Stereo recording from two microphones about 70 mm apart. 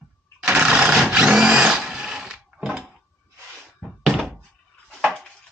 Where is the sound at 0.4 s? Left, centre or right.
Centre.